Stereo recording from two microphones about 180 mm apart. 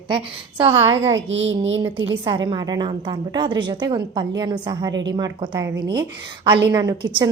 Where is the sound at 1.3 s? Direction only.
90° right.